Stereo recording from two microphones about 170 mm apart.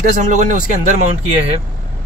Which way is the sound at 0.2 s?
45° right (ahead or behind).